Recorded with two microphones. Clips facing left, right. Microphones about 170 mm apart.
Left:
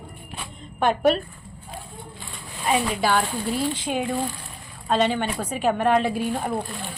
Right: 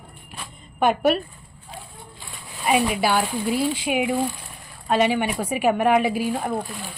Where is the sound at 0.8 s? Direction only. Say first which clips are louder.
Right 1 dB; 5° right (ahead or behind).